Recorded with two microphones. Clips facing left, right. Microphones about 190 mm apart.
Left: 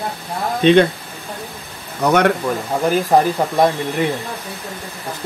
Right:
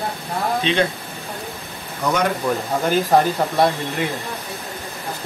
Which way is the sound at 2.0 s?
65° left (ahead or behind).